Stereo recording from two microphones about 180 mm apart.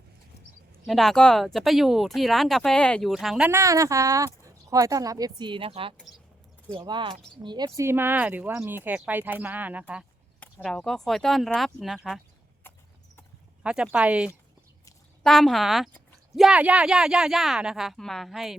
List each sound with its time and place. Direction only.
0.9 s speech: centre (ahead or behind)
3.5 s speech: 15° right (ahead or behind)
7.8 s speech: 15° right (ahead or behind)
12.7 s clip-clop: 10° left (ahead or behind)
13.6 s speech: 5° right (ahead or behind)